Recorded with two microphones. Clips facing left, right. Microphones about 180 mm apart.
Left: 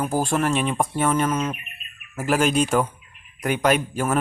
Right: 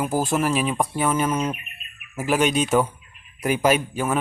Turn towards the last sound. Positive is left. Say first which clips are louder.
# even
turn(degrees=0)  # may be behind; listen again after turning